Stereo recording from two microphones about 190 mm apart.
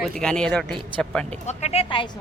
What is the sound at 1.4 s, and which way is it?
Speech, 35° left (ahead or behind).